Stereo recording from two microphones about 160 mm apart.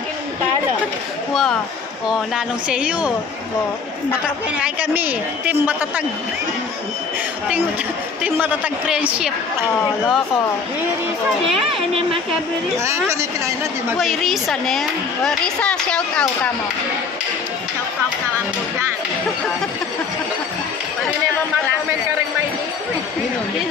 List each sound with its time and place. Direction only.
1.3 s speech: centre (ahead or behind)
4.6 s a woman's voice: 10° right (ahead or behind)
8.2 s speech: 5° right (ahead or behind)
12.8 s a woman's voice: 15° right (ahead or behind)
13.9 s speech: centre (ahead or behind)